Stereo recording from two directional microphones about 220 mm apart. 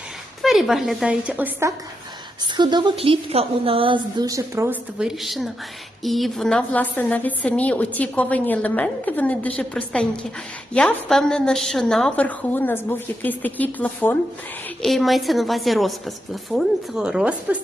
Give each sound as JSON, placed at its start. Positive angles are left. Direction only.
{"t": 0.4, "sound": "a woman's voice", "side_deg": 0}
{"t": 2.4, "sound": "a woman's voice", "side_deg": -20}